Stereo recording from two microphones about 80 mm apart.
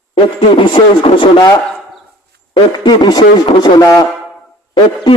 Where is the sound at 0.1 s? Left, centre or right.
Left.